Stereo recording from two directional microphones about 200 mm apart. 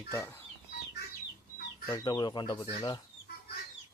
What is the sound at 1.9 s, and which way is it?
Speech, 20° left (ahead or behind).